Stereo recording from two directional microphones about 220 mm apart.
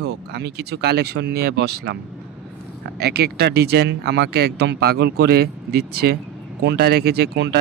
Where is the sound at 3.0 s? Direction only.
45° right (ahead or behind).